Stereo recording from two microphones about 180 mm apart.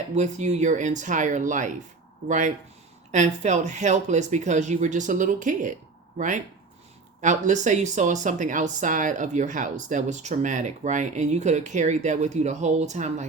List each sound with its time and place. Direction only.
0.1 s speech: 40° right (ahead or behind)